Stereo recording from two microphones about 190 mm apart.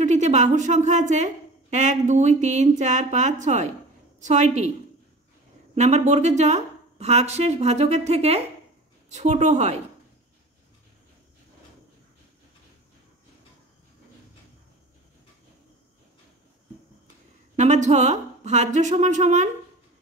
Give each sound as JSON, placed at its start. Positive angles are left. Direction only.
{"t": 0.0, "sound": "a woman's voice", "side_deg": -40}
{"t": 5.8, "sound": "a woman's voice", "side_deg": -35}
{"t": 17.6, "sound": "a woman's voice", "side_deg": -40}